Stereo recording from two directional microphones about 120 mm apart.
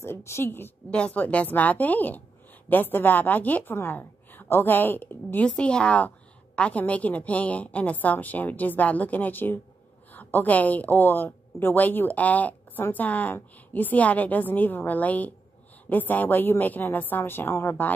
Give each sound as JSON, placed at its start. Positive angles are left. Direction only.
{"t": 0.0, "sound": "a woman's voice", "side_deg": 20}